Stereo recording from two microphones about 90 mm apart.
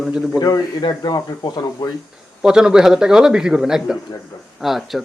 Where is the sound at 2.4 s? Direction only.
5° right (ahead or behind).